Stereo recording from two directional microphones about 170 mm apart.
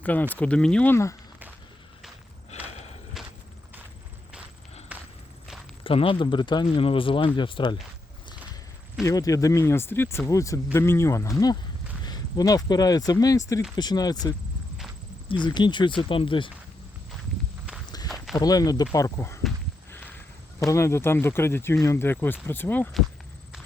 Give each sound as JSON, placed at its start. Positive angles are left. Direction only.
{"t": 0.0, "sound": "speech", "side_deg": 10}
{"t": 2.5, "sound": "walk", "side_deg": 40}
{"t": 3.2, "sound": "horse", "side_deg": -5}
{"t": 4.9, "sound": "walk", "side_deg": -5}
{"t": 5.8, "sound": "speech", "side_deg": 30}
{"t": 9.0, "sound": "speech", "side_deg": 20}
{"t": 17.8, "sound": "walk", "side_deg": 25}
{"t": 18.3, "sound": "speech", "side_deg": 20}
{"t": 20.7, "sound": "speech", "side_deg": 15}